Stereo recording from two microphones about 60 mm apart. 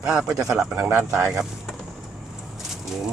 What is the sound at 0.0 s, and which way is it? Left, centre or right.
Speech, centre.